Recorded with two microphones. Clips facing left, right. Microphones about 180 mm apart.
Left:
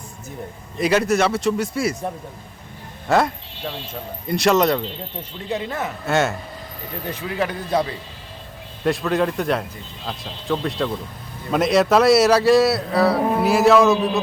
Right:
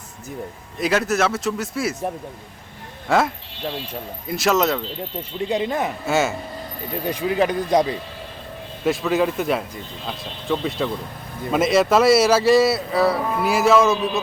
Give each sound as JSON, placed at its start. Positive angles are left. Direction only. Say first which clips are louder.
{"t": 0.8, "sound": "a man's voice", "louder": "left 2 dB", "side_deg": 0}
{"t": 3.1, "sound": "a man's voice", "louder": "left 1 dB", "side_deg": -5}
{"t": 5.5, "sound": "speech", "louder": "right 3 dB", "side_deg": -15}
{"t": 6.1, "sound": "a man's voice", "louder": "left 1 dB", "side_deg": 0}
{"t": 7.0, "sound": "speech", "louder": "right 5 dB", "side_deg": -15}
{"t": 8.8, "sound": "a man's voice", "louder": "even", "side_deg": 0}